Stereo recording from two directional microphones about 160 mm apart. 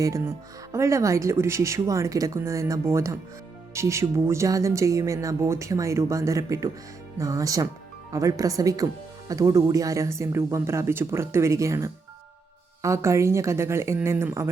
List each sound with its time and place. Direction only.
0.0 s speech: 20° right (ahead or behind)